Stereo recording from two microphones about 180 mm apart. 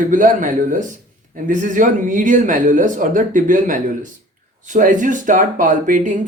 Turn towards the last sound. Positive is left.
turn(degrees=-45)  # may be behind; listen again after turning